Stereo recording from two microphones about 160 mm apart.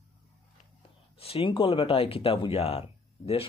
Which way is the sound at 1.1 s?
35° left (ahead or behind).